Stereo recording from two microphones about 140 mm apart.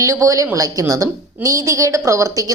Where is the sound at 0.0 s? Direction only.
20° right (ahead or behind).